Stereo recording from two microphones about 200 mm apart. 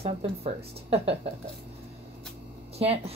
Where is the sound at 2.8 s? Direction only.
30° right (ahead or behind).